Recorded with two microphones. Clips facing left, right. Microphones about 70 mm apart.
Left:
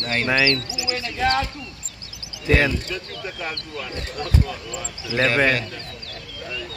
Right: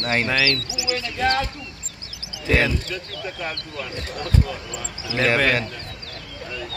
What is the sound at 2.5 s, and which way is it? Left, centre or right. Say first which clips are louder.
Speech: left 1 dB; centre.